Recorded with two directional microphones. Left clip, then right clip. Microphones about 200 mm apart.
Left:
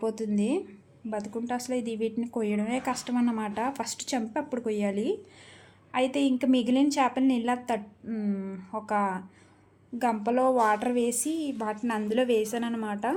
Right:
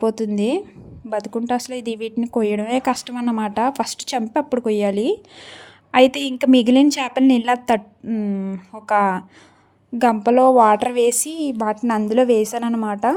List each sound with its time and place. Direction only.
0.0 s a woman's voice: 40° right (ahead or behind)